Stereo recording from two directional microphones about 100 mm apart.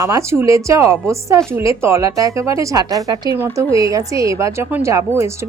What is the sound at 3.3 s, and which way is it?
A woman's voice, 25° right (ahead or behind).